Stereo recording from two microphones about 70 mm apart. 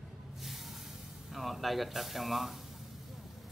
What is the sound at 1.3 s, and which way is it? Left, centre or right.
Speech, centre.